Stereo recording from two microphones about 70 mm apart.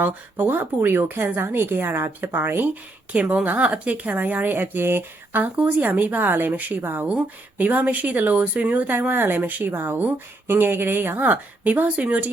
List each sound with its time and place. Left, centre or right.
0.0 s a woman's voice: right